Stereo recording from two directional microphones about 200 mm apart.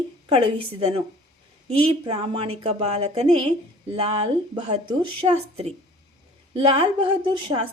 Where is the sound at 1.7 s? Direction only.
30° right (ahead or behind).